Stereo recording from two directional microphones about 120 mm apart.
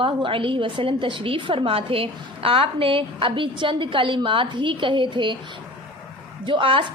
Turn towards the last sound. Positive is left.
turn(degrees=-50)  # may be behind; listen again after turning